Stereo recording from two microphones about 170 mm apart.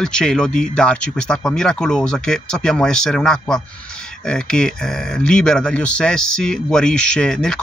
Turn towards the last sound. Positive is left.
turn(degrees=5)  # may be behind; listen again after turning